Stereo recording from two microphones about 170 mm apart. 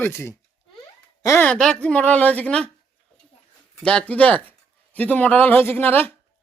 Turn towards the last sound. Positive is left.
turn(degrees=10)  # may be behind; listen again after turning